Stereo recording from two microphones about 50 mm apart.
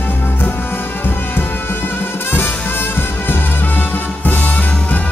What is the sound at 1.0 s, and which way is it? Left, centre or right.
Music, left.